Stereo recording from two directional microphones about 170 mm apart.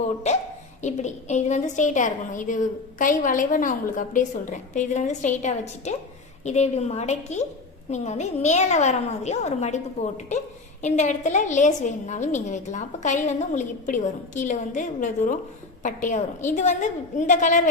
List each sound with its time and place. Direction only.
0.8 s a woman's voice: 45° left (ahead or behind)